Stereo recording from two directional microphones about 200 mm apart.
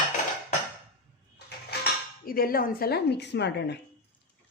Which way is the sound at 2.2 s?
45° left (ahead or behind).